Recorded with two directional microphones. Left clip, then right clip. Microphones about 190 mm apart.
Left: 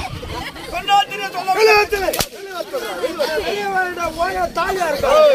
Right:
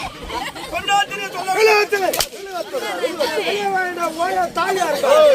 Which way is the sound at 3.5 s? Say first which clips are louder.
Even; 15° left (ahead or behind).